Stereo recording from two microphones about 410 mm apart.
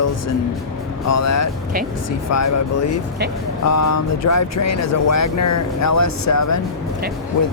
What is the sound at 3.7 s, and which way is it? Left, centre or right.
Speech, left.